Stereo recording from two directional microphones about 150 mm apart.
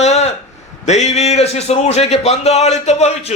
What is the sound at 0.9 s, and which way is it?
A man's voice, 50° left (ahead or behind).